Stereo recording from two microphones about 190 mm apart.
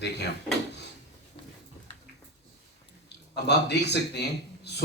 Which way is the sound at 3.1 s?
60° left (ahead or behind).